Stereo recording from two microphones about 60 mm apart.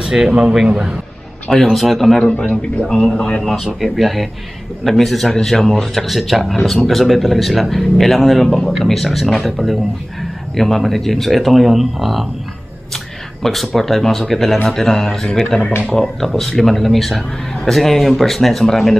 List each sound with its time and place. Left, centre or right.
0.0 s speech: centre
1.5 s a man's voice: centre
2.2 s a man's voice: left
3.4 s a man's voice: centre
12.9 s a sound: centre
13.7 s a man's voice: centre